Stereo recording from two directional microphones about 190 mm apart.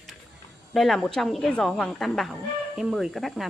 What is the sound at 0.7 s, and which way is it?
Speech, centre (ahead or behind).